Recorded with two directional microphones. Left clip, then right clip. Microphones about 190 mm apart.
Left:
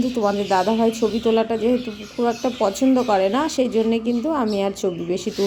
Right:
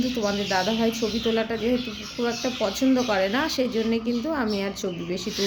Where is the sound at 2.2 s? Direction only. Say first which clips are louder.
Left 6 dB; 20° left (ahead or behind).